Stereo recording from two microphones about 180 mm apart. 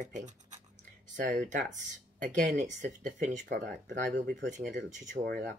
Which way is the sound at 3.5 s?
75° right (ahead or behind).